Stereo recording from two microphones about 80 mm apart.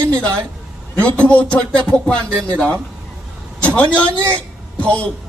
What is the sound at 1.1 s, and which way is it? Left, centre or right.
A woman's voice, centre.